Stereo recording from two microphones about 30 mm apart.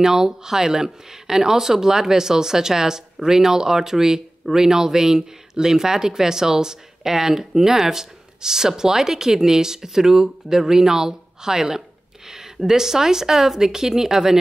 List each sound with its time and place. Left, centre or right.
0.0 s speech: centre